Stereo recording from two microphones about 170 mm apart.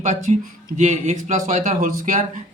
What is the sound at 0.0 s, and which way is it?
A man's voice, 45° right (ahead or behind).